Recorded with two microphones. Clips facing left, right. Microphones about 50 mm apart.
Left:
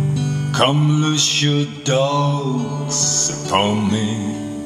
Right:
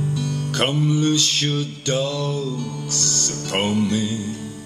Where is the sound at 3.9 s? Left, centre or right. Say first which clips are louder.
Left 3 dB; left.